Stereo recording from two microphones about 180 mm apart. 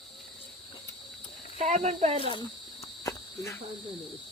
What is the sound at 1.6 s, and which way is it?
Speech, 35° right (ahead or behind).